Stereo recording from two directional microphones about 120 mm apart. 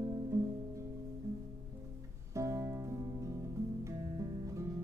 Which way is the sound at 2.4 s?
25° right (ahead or behind).